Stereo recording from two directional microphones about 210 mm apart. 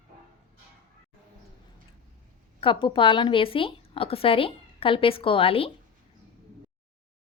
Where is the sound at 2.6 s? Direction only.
25° left (ahead or behind).